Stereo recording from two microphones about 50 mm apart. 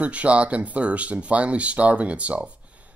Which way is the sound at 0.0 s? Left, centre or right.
Right.